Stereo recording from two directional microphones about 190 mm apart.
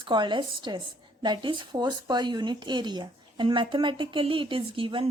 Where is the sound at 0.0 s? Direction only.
25° right (ahead or behind).